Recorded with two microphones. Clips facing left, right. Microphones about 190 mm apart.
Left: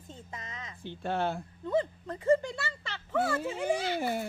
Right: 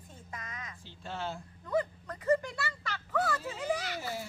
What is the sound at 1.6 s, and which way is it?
Speech, 25° left (ahead or behind).